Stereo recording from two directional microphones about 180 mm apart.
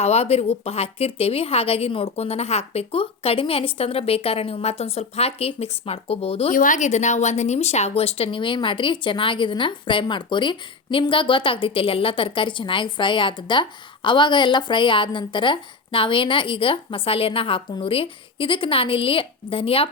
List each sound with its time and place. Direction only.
0.0 s a woman's voice: 35° left (ahead or behind)
6.5 s a woman's voice: 45° left (ahead or behind); by 19.9 s 30° left (ahead or behind)